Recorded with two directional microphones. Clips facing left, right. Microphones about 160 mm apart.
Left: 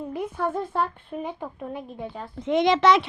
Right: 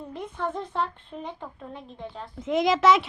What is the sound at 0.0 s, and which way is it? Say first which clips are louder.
A child's voice: left 4 dB; 10° left (ahead or behind).